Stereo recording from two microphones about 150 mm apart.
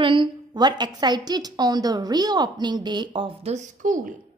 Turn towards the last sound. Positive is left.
turn(degrees=-60)  # may be behind; listen again after turning